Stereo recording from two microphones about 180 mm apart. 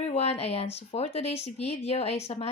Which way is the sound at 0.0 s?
35° left (ahead or behind).